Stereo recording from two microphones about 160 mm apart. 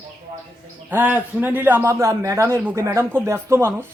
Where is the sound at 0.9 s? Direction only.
10° right (ahead or behind).